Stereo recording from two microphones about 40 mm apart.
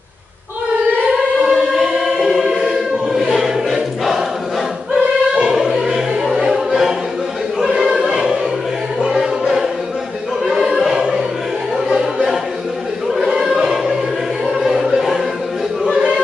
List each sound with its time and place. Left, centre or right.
1.3 s music: right
1.7 s choir: centre
5.5 s music: centre
7.7 s choir: centre
9.0 s music: centre
10.4 s choir: centre
11.7 s music: centre
13.5 s choir: centre
14.4 s choir: centre
15.8 s a sound: right